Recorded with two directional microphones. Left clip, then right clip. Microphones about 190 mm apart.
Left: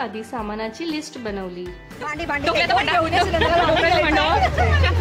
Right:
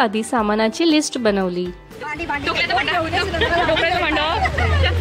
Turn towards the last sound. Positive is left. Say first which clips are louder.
# left 1 dB
turn(degrees=5)  # may be behind; listen again after turning